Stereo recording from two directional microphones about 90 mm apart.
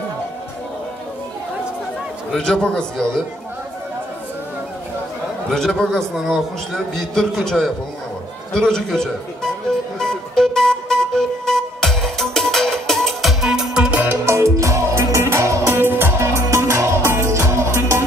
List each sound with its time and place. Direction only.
2.3 s a man's voice: 10° left (ahead or behind)
5.5 s a man's voice: 5° left (ahead or behind)
8.5 s music: 5° left (ahead or behind); by 14.1 s 15° right (ahead or behind)
14.2 s music: 30° right (ahead or behind)